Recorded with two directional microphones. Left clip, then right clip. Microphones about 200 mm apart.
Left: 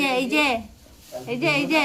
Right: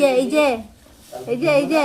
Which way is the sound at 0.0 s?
10° left (ahead or behind).